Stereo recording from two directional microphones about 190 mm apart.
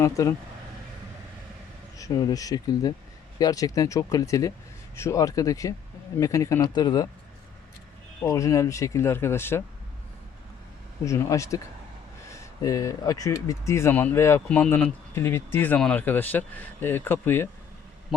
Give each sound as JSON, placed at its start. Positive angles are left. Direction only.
{"t": 0.0, "sound": "speech", "side_deg": 15}
{"t": 2.0, "sound": "speech", "side_deg": 20}
{"t": 8.2, "sound": "speech", "side_deg": 15}
{"t": 11.0, "sound": "speech", "side_deg": 15}